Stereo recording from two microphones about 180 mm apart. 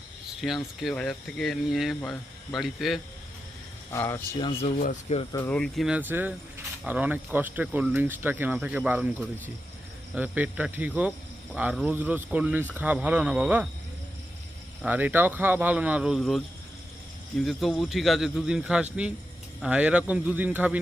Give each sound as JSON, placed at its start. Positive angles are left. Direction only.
{"t": 0.4, "sound": "speech", "side_deg": 0}
{"t": 3.9, "sound": "speech", "side_deg": 15}
{"t": 4.4, "sound": "speech", "side_deg": 30}
{"t": 4.8, "sound": "speech", "side_deg": 40}
{"t": 5.3, "sound": "speech", "side_deg": 10}
{"t": 10.2, "sound": "speech", "side_deg": -10}
{"t": 14.8, "sound": "speech", "side_deg": -10}
{"t": 17.4, "sound": "speech", "side_deg": 0}